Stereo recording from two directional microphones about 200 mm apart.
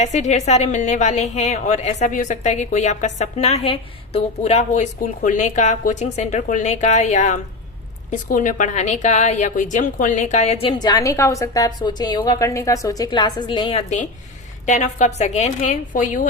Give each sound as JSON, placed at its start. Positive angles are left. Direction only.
{"t": 0.0, "sound": "a woman's voice", "side_deg": 35}